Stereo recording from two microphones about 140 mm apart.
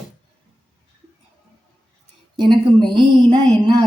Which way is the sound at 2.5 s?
35° right (ahead or behind).